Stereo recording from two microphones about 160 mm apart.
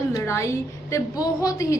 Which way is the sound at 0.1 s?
20° left (ahead or behind).